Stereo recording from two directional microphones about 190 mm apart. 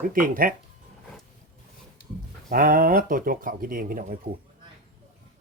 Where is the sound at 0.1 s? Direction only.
45° right (ahead or behind).